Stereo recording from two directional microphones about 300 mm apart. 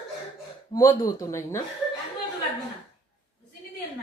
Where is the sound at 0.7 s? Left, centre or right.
Centre.